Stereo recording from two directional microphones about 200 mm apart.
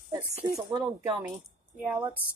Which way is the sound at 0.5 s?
20° right (ahead or behind).